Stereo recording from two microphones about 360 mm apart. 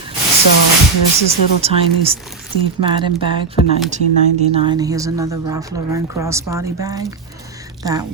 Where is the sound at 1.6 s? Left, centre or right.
Centre.